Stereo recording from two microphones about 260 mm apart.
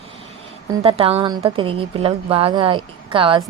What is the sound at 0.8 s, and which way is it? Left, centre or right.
A woman's voice, right.